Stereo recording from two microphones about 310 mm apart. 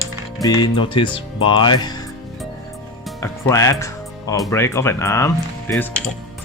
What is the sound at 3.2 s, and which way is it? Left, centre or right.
Speech, centre.